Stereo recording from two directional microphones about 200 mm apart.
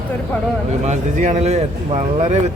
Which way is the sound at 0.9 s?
40° right (ahead or behind).